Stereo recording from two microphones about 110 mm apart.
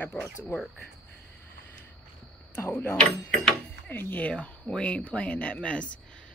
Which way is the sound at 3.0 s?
5° left (ahead or behind).